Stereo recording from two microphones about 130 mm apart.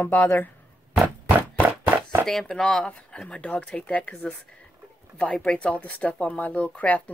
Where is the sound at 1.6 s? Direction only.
15° right (ahead or behind).